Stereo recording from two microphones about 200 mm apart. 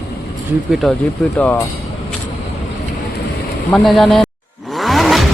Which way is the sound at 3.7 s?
Centre (ahead or behind).